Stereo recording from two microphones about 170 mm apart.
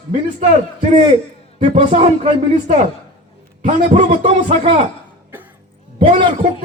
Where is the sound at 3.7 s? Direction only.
50° right (ahead or behind).